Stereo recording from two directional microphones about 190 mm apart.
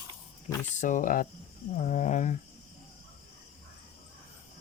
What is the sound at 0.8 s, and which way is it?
Speech, 45° left (ahead or behind).